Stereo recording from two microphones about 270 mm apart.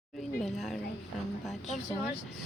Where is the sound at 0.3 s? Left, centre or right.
Centre.